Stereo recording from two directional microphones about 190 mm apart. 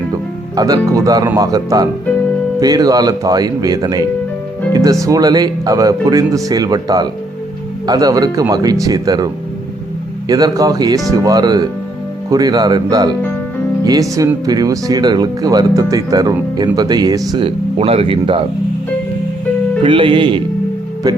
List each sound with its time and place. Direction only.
0.5 s speech: 20° right (ahead or behind)
19.8 s speech: 25° right (ahead or behind)